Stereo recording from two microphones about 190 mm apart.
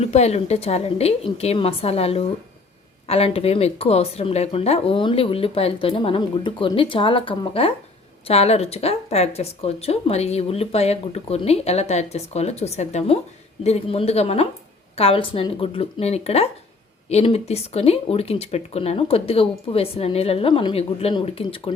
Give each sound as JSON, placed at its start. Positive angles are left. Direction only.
{"t": 0.0, "sound": "speech", "side_deg": 35}